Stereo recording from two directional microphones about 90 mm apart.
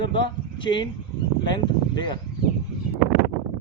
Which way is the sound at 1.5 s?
55° left (ahead or behind).